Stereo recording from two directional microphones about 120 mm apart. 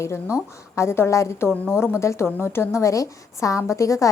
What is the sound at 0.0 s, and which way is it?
A woman's voice, 25° left (ahead or behind).